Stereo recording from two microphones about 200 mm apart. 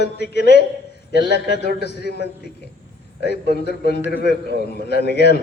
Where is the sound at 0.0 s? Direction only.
55° left (ahead or behind).